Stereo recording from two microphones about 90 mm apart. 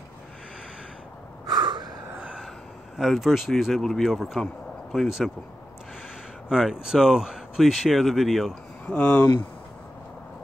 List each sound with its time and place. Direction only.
1.4 s snort: 50° right (ahead or behind)
2.1 s a sound: 10° right (ahead or behind)
3.0 s speech: centre (ahead or behind)
6.5 s speech: 5° right (ahead or behind)
8.8 s speech: 15° left (ahead or behind)